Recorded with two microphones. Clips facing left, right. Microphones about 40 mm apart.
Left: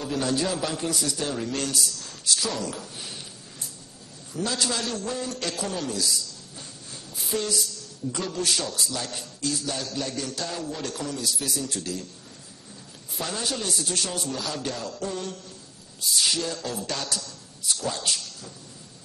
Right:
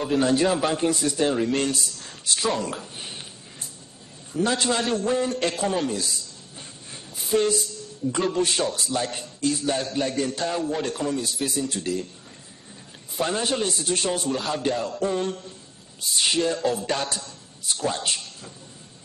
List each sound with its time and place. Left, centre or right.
0.0 s a man's voice: right
4.3 s a man's voice: right
7.3 s a man's voice: right
13.2 s a man's voice: right